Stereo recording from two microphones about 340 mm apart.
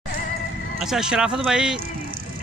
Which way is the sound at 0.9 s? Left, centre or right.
Centre.